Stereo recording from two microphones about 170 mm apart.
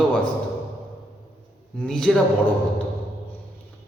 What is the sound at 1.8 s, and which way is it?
Speech, 5° left (ahead or behind).